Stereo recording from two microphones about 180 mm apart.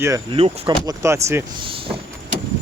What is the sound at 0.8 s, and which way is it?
Speech, 15° right (ahead or behind).